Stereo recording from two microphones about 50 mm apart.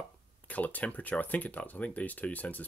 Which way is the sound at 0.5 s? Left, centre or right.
Left.